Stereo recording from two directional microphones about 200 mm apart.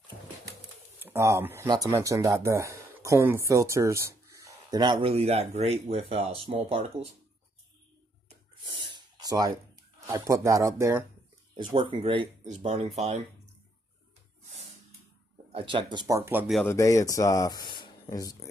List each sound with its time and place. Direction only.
1.0 s speech: 15° right (ahead or behind)
8.8 s snort: 20° right (ahead or behind)
10.0 s speech: 15° right (ahead or behind); by 13.2 s 35° right (ahead or behind)
15.5 s speech: 25° right (ahead or behind); by 16.6 s 5° right (ahead or behind)
16.6 s speech: 15° left (ahead or behind)